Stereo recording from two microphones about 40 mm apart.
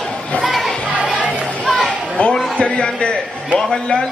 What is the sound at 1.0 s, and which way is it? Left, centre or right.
Music, right.